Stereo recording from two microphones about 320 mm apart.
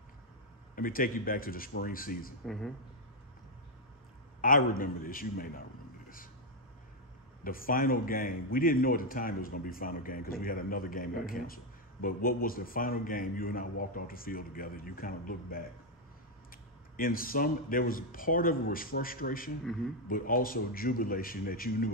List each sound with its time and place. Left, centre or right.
0.7 s a man's voice: left
2.4 s speech: centre
4.4 s a man's voice: left
7.4 s a man's voice: left
16.9 s a man's voice: left